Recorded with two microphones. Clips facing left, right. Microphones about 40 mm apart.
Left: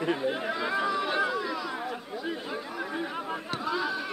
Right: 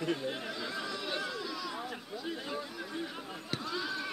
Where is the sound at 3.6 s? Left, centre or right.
Centre.